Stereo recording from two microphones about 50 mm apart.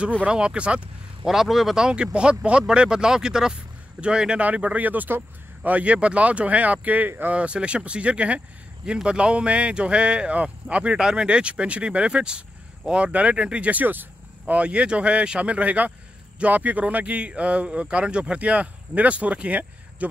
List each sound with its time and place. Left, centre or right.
0.2 s a man's voice: right
1.2 s speech: centre
4.4 s speech: right
7.3 s a man's voice: right
11.0 s speech: centre
11.2 s a man's voice: right
14.5 s a man's voice: right